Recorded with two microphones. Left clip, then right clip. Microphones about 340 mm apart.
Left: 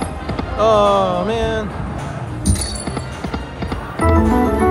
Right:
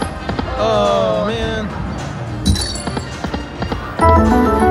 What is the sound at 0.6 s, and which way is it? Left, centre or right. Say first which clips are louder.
Music: left 2 dB; centre.